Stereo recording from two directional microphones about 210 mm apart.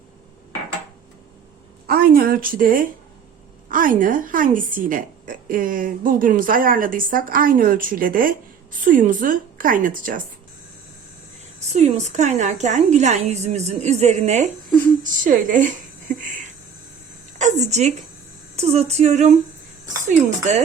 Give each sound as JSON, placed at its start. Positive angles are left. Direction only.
{"t": 1.9, "sound": "a woman's voice", "side_deg": -45}
{"t": 11.7, "sound": "a woman's voice", "side_deg": -35}
{"t": 17.3, "sound": "a woman's voice", "side_deg": -35}